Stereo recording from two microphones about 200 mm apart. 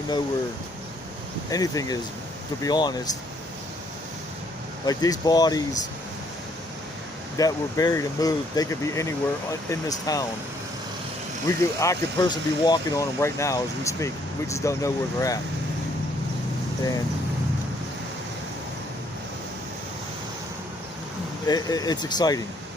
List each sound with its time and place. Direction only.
1.5 s speech: 15° left (ahead or behind)
4.9 s speech: 20° left (ahead or behind)
7.3 s speech: 15° left (ahead or behind)
11.4 s speech: 15° left (ahead or behind)
21.4 s speech: 20° left (ahead or behind)